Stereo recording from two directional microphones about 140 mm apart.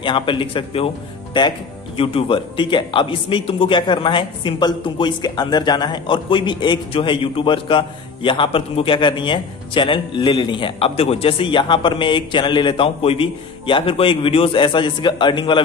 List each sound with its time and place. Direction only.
0.0 s a man's voice: 35° left (ahead or behind)
2.0 s a man's voice: 40° left (ahead or behind)